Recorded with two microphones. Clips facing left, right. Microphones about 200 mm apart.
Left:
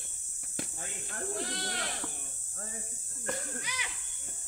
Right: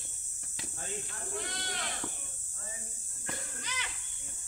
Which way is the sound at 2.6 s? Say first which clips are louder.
Left 4 dB; 50° left (ahead or behind).